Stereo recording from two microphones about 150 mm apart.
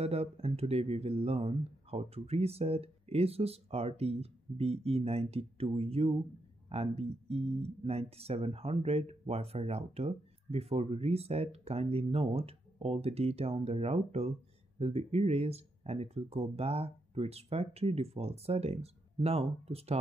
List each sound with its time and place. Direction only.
0.0 s speech: 40° right (ahead or behind)